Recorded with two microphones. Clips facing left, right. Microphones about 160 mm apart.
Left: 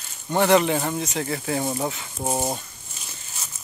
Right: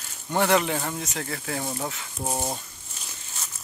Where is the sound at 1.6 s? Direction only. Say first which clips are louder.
Left 5 dB; 20° left (ahead or behind).